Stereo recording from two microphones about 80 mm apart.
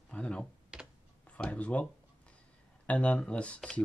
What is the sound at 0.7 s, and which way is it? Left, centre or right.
Computer keyboard, centre.